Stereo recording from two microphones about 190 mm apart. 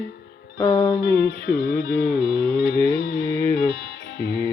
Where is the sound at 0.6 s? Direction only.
20° left (ahead or behind).